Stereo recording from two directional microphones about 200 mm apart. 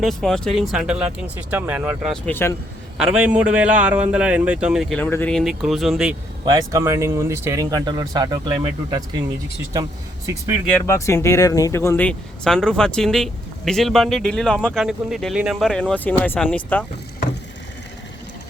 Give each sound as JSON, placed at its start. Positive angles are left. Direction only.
{"t": 0.0, "sound": "speech", "side_deg": 0}
{"t": 2.2, "sound": "speech", "side_deg": 10}
{"t": 3.0, "sound": "speech", "side_deg": -5}
{"t": 6.4, "sound": "speech", "side_deg": -20}
{"t": 10.7, "sound": "speech", "side_deg": 15}